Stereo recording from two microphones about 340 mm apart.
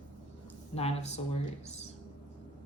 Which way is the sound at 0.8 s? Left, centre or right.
Centre.